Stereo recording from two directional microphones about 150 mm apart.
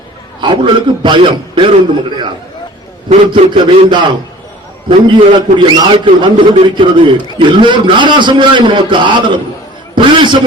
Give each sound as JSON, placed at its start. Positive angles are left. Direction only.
{"t": 0.4, "sound": "a man's voice", "side_deg": -30}
{"t": 3.3, "sound": "a man's voice", "side_deg": -35}
{"t": 9.9, "sound": "a sound", "side_deg": -30}